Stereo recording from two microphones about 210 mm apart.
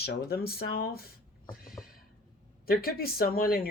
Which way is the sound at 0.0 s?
50° left (ahead or behind).